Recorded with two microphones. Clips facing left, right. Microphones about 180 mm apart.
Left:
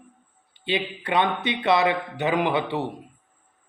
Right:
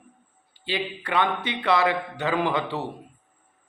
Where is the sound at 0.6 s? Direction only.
20° left (ahead or behind).